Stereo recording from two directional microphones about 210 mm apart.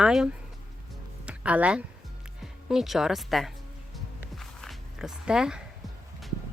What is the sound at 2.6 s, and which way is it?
Speech, centre (ahead or behind).